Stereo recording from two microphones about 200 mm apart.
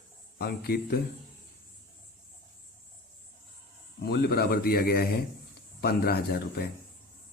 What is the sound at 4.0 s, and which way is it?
Speech, 55° left (ahead or behind).